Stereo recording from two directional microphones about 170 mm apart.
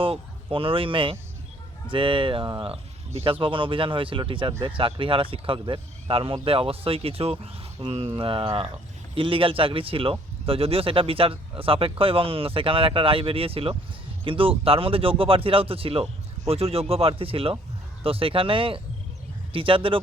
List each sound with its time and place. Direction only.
0.0 s speech: 30° right (ahead or behind)